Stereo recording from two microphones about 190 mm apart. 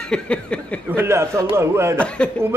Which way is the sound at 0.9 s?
15° right (ahead or behind).